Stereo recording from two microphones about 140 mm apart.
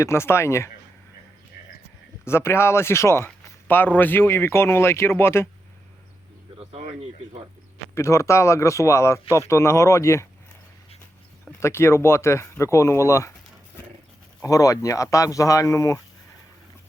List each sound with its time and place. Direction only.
0.0 s speech: 20° left (ahead or behind)
1.6 s a sound: 90° left
2.2 s a man's voice: 20° left (ahead or behind)
6.6 s speech: 45° right (ahead or behind)
7.9 s speech: 20° left (ahead or behind)
11.6 s speech: 20° left (ahead or behind)
14.4 s speech: 25° left (ahead or behind)